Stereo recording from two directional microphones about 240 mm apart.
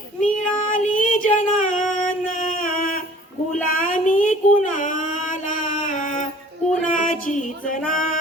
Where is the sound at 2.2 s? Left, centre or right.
Left.